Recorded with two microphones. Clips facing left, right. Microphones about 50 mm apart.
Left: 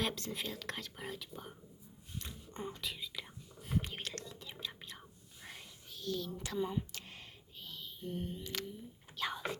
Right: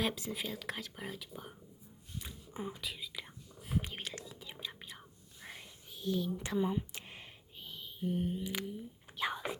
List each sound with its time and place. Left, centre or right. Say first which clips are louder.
0.0 s speech: right 2 dB; centre
2.5 s whispering: right 1 dB; centre
6.0 s a sound: right 4 dB; centre
9.1 s whispering: right 2 dB; centre